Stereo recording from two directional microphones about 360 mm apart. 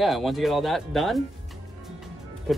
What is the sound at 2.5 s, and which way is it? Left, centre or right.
Speech, centre.